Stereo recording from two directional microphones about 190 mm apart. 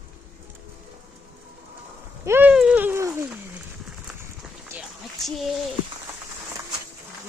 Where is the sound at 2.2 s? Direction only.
10° right (ahead or behind).